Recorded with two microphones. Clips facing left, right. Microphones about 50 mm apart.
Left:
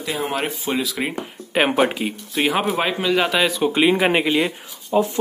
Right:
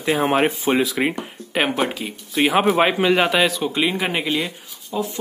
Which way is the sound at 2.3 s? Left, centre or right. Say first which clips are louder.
Right 4 dB; centre.